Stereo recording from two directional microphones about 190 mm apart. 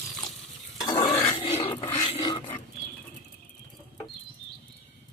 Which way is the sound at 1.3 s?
30° left (ahead or behind).